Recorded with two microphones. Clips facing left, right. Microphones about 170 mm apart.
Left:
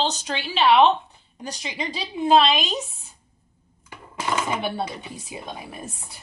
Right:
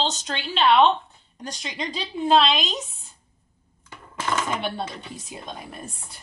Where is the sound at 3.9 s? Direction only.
10° left (ahead or behind).